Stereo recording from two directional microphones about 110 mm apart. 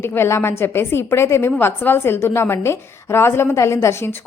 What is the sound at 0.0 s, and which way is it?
A woman's voice, 20° left (ahead or behind).